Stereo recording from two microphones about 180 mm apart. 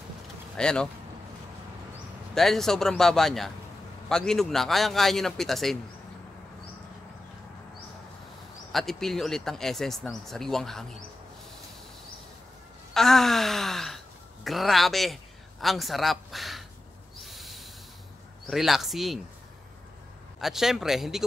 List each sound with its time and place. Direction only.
0.6 s speech: 5° left (ahead or behind)
2.3 s speech: centre (ahead or behind)
8.7 s speech: centre (ahead or behind)
12.9 s gasp: centre (ahead or behind)
15.6 s a man's voice: centre (ahead or behind)
17.2 s owl: centre (ahead or behind)
18.5 s speech: centre (ahead or behind)
20.3 s speech: centre (ahead or behind)